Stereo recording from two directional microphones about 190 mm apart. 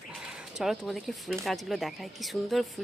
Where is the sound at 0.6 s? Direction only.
Centre (ahead or behind).